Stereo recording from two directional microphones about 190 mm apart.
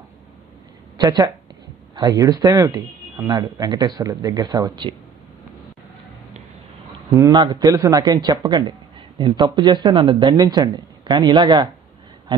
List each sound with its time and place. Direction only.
0.9 s speech: 20° right (ahead or behind)
7.1 s speech: 20° right (ahead or behind)